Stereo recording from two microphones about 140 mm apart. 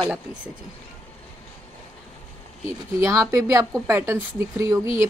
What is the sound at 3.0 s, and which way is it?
A woman's voice, 20° right (ahead or behind).